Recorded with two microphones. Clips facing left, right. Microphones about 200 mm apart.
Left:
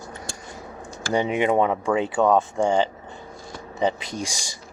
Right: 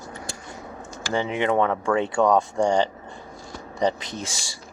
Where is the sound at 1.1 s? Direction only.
15° left (ahead or behind).